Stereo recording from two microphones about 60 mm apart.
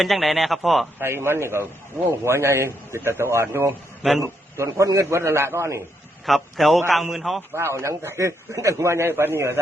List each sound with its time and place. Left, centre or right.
0.0 s a man's voice: centre
0.9 s a man's voice: right
5.0 s a man's voice: right
6.2 s a man's voice: centre
7.5 s a man's voice: right